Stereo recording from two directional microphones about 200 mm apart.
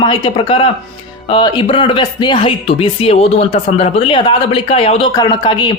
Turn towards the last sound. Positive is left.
turn(degrees=20)  # may be behind; listen again after turning